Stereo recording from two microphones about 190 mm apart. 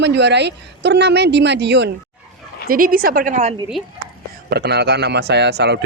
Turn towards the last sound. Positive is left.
turn(degrees=-60)  # may be behind; listen again after turning